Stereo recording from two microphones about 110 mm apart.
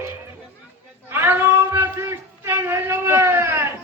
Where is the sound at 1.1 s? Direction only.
20° right (ahead or behind).